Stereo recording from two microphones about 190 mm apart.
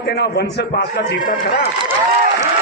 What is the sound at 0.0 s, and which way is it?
A man's voice, 60° left (ahead or behind).